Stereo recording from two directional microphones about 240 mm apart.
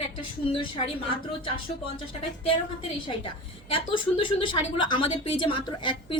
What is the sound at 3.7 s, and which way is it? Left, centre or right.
A woman's voice, left.